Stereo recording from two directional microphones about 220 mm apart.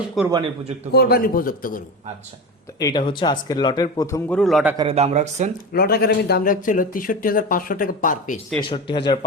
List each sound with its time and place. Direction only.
0.2 s a man's voice: centre (ahead or behind)
0.9 s speech: 45° left (ahead or behind)
2.7 s speech: 20° left (ahead or behind)
4.4 s a man's voice: centre (ahead or behind)
4.8 s speech: 25° right (ahead or behind)
5.7 s speech: 45° left (ahead or behind)
8.5 s speech: 20° left (ahead or behind)